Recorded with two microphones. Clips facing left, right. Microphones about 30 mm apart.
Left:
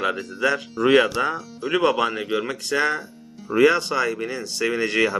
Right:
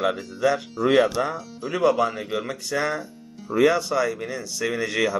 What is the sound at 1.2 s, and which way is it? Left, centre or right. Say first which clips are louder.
Speech: left 2 dB; left.